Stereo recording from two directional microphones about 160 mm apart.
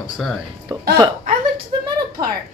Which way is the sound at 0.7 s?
25° right (ahead or behind).